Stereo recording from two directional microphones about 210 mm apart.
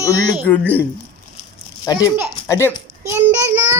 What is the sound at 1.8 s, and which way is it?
Speech, 15° left (ahead or behind).